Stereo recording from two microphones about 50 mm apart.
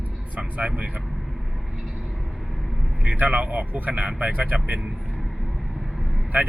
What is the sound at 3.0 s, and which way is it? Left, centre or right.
Speech, right.